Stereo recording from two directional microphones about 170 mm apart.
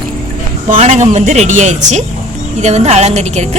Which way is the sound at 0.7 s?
45° right (ahead or behind).